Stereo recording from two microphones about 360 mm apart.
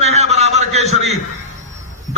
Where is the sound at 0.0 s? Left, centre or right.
Centre.